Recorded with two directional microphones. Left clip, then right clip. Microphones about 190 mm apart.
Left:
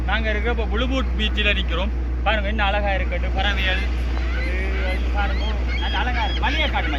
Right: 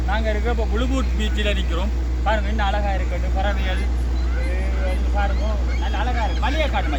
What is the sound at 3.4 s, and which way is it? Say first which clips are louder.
Speech: left 4 dB; 50° right (ahead or behind).